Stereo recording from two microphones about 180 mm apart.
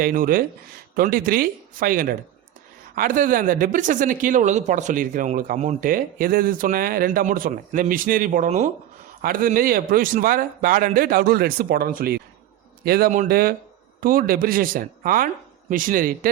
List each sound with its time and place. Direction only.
0.0 s speech: 50° right (ahead or behind)